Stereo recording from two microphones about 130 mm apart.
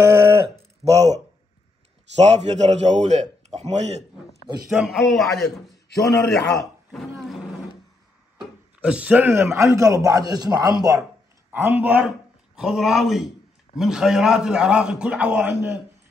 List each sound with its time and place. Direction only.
0.8 s a man's voice: 55° right (ahead or behind)
4.6 s a man's voice: centre (ahead or behind)
8.8 s a man's voice: 10° right (ahead or behind); by 11.1 s 25° right (ahead or behind)
11.5 s a man's voice: 15° right (ahead or behind)